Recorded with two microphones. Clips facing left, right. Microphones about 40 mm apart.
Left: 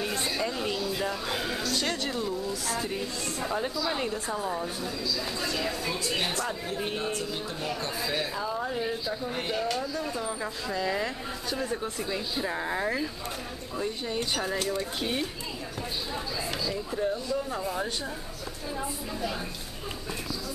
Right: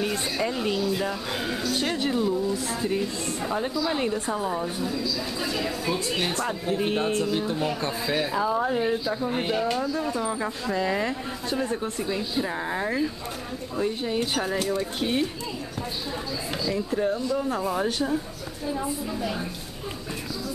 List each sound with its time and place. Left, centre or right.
0.2 s speech: centre
1.8 s speech: centre
2.2 s speech: centre
2.5 s speech: centre
6.4 s speech: right
8.1 s speech: centre
10.4 s speech: centre
13.7 s speech: centre
16.9 s speech: right
17.3 s speech: centre
18.7 s speech: centre